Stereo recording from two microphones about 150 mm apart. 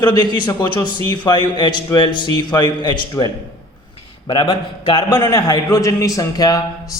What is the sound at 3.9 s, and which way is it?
A man's voice, 35° left (ahead or behind).